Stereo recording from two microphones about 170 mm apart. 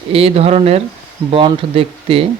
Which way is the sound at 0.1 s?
35° right (ahead or behind).